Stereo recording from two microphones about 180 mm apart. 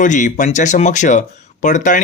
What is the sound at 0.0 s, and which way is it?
Speech, 45° left (ahead or behind).